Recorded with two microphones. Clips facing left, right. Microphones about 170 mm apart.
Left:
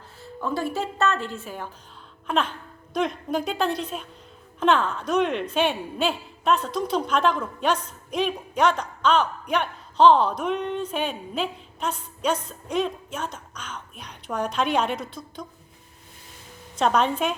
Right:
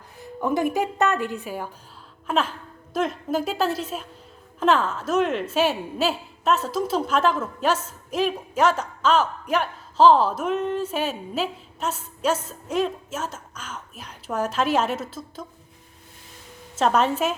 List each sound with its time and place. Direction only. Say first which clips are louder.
0.2 s a woman's voice: right 4 dB; 20° right (ahead or behind)
16.7 s a woman's voice: right 1 dB; 5° right (ahead or behind)